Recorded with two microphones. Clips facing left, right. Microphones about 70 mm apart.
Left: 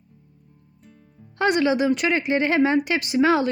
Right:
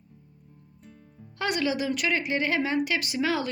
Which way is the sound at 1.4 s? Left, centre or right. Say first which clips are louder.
Left 8 dB; left.